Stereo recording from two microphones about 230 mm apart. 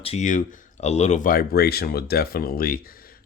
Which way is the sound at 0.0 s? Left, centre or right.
Left.